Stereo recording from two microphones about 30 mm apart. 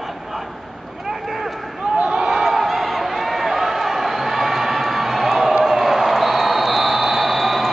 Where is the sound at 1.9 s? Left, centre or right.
Right.